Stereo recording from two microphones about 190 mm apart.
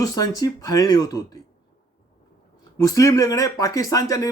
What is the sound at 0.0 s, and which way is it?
Speech, 20° left (ahead or behind).